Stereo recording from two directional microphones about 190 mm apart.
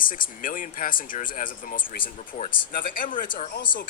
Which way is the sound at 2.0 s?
30° left (ahead or behind).